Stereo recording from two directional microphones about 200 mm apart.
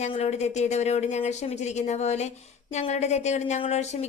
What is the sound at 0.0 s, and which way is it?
Speech, 35° left (ahead or behind).